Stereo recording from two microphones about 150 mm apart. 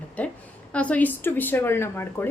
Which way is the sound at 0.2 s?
10° left (ahead or behind).